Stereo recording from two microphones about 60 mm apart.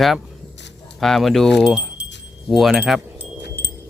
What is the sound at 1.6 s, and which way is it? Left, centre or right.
Speech, centre.